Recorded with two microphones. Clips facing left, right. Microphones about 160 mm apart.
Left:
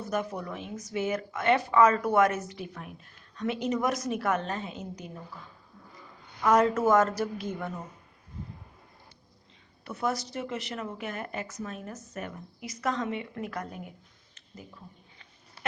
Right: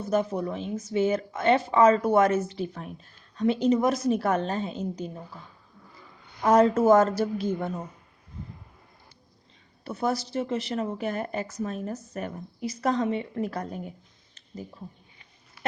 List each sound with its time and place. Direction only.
0.0 s speech: 25° right (ahead or behind)
6.4 s speech: 30° right (ahead or behind)
9.8 s speech: 30° right (ahead or behind)